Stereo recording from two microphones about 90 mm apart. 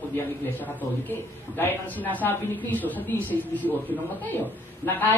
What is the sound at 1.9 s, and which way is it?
Speech, 20° right (ahead or behind).